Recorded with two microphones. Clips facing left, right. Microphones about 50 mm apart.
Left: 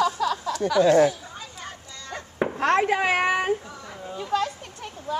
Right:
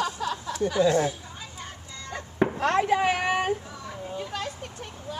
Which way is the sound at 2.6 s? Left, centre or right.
Left.